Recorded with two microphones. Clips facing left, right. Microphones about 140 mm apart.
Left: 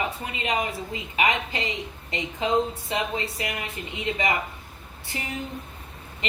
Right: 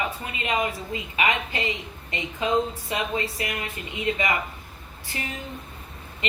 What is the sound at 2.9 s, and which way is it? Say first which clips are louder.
Speech: right 1 dB; 25° left (ahead or behind).